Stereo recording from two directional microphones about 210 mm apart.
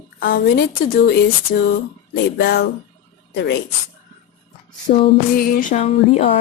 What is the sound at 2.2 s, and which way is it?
A woman's voice, 50° left (ahead or behind).